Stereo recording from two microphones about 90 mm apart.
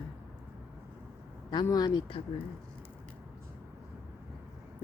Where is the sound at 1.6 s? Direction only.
45° left (ahead or behind).